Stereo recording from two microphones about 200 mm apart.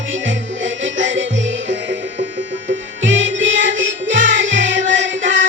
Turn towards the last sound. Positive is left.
turn(degrees=-65)  # may be behind; listen again after turning